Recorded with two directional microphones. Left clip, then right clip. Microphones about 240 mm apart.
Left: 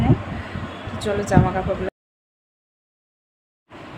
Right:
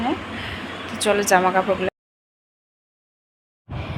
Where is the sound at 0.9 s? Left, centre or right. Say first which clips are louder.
Right 4 dB; centre.